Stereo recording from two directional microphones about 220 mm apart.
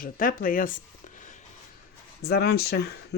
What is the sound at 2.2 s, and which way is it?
Speech, 50° left (ahead or behind).